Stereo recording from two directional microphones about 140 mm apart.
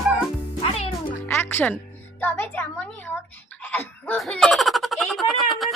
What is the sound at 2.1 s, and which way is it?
A child's voice, 15° left (ahead or behind).